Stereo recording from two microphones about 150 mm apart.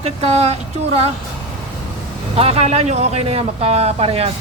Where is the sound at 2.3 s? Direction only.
40° right (ahead or behind).